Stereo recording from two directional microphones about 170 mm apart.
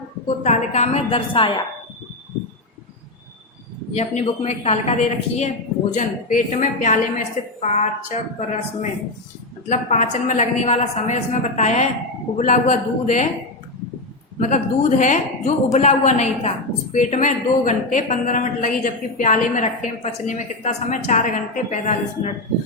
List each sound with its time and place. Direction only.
0.4 s a woman's voice: 40° left (ahead or behind)
3.9 s a woman's voice: 40° left (ahead or behind)
14.3 s speech: 45° left (ahead or behind)